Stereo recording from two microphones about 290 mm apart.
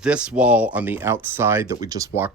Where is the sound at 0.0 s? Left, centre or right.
Centre.